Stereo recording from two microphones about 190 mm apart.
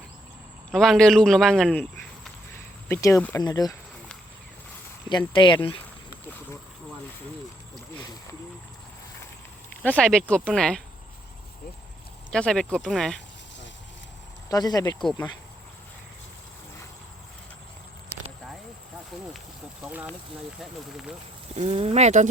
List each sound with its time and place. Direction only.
0.7 s a man's voice: 5° left (ahead or behind)
2.9 s speech: 15° left (ahead or behind)
3.4 s speech: 20° left (ahead or behind)
5.3 s speech: 25° left (ahead or behind)
5.7 s a sound: 20° left (ahead or behind)
9.8 s a man's voice: 5° left (ahead or behind)
12.3 s a man's voice: 5° left (ahead or behind)
14.5 s speech: 20° left (ahead or behind)
19.8 s a man's voice: 5° right (ahead or behind)
21.5 s speech: 35° right (ahead or behind)